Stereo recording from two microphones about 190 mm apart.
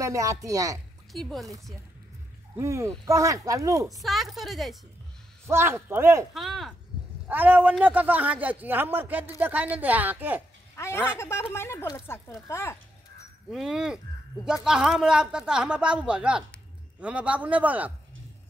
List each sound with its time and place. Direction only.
0.0 s speech: 15° right (ahead or behind)
1.1 s a man's voice: centre (ahead or behind)
2.5 s speech: 15° right (ahead or behind)
3.9 s a man's voice: centre (ahead or behind)
5.5 s speech: 15° right (ahead or behind)
6.3 s a man's voice: centre (ahead or behind)
10.8 s speech: 10° left (ahead or behind)
13.5 s a man's voice: centre (ahead or behind)